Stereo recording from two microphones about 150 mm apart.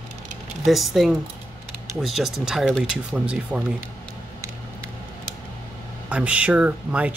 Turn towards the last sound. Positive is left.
turn(degrees=-10)  # may be behind; listen again after turning